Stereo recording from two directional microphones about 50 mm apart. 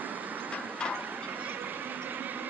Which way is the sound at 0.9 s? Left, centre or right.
Right.